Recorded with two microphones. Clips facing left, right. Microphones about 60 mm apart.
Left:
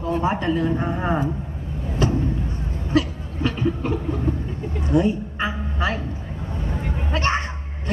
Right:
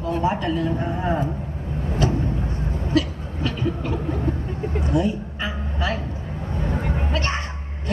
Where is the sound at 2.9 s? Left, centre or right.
Left.